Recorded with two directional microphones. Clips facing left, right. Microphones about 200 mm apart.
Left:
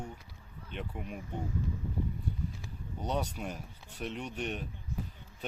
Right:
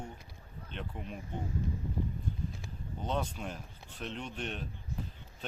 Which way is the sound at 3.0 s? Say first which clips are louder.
Left 1 dB; 10° left (ahead or behind).